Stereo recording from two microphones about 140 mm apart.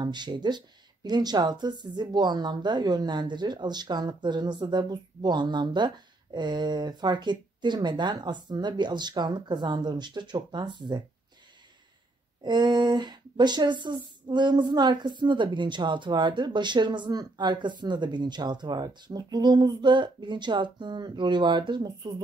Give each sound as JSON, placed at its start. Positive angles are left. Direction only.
{"t": 0.0, "sound": "speech", "side_deg": -30}
{"t": 12.4, "sound": "speech", "side_deg": -30}